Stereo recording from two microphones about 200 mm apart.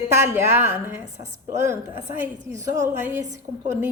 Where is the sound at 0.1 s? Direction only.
10° right (ahead or behind).